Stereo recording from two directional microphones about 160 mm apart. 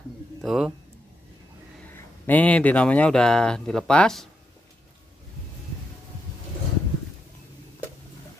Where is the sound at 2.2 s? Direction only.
10° left (ahead or behind).